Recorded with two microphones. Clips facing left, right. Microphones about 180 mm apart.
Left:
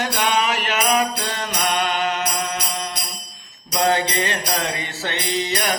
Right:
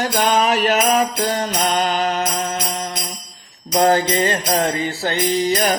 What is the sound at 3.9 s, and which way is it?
Mantra, 40° right (ahead or behind).